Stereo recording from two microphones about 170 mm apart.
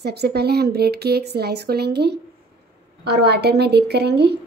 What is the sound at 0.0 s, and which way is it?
A woman's voice, 75° right (ahead or behind).